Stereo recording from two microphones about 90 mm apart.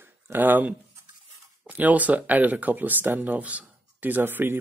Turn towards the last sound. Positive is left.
turn(degrees=-25)  # may be behind; listen again after turning